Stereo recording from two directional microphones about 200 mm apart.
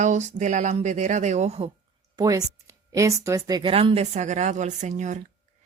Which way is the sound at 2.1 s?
15° right (ahead or behind).